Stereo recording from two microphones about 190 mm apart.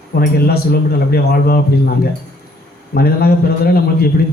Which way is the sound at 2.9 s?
55° left (ahead or behind).